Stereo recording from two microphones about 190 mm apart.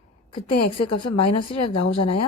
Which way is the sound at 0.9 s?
30° left (ahead or behind).